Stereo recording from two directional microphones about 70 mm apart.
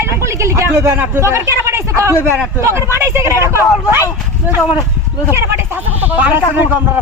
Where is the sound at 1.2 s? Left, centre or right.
Right.